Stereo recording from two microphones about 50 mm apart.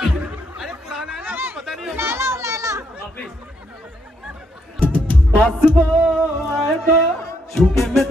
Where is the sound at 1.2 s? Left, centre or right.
Right.